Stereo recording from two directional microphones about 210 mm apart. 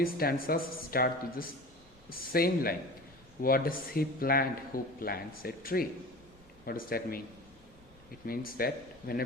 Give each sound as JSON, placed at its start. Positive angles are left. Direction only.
{"t": 0.0, "sound": "a man's voice", "side_deg": 45}
{"t": 8.3, "sound": "a man's voice", "side_deg": 45}